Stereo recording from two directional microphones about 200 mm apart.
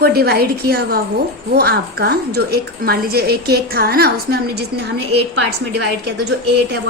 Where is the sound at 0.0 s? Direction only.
50° right (ahead or behind).